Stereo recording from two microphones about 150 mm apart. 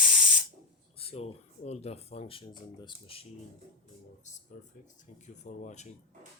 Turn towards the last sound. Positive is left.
turn(degrees=50)  # may be behind; listen again after turning